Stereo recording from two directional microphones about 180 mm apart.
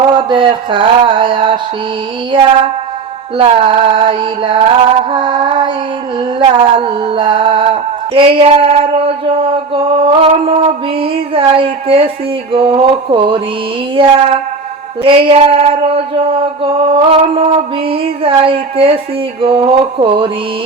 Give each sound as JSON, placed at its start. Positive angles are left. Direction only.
{"t": 0.0, "sound": "female singing", "side_deg": -25}
{"t": 3.3, "sound": "female singing", "side_deg": -30}
{"t": 8.1, "sound": "a sound", "side_deg": -30}
{"t": 13.9, "sound": "female singing", "side_deg": -30}
{"t": 15.0, "sound": "a sound", "side_deg": -30}
{"t": 19.4, "sound": "female singing", "side_deg": -30}